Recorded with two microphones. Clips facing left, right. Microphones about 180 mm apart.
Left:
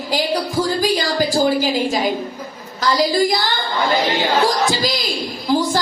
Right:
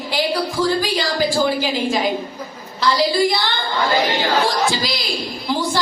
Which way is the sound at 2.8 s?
40° left (ahead or behind).